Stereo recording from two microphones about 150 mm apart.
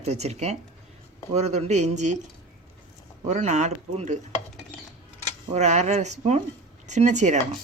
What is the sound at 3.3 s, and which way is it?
Speech, 50° right (ahead or behind).